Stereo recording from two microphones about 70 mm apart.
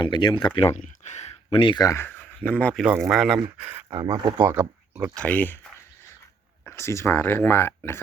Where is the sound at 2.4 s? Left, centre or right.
Centre.